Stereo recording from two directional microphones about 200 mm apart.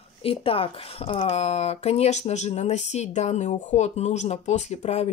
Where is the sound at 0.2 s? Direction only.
25° left (ahead or behind).